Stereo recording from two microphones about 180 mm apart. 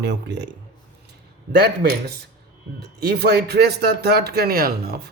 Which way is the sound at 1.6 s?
65° right (ahead or behind).